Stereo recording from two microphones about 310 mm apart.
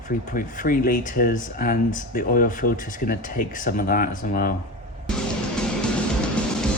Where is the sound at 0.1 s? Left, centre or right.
Left.